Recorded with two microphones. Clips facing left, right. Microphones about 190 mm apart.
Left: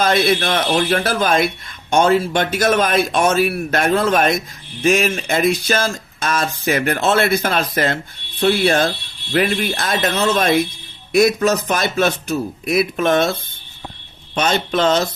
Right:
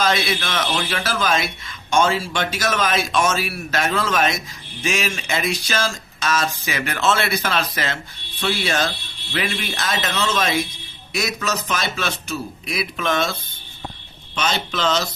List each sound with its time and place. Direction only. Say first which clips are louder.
0.0 s speech: left 5 dB; 55° left (ahead or behind)
14.3 s speech: left 6 dB; 55° left (ahead or behind)